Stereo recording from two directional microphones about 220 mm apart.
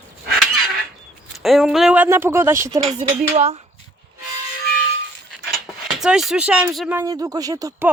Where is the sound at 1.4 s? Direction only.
Centre (ahead or behind).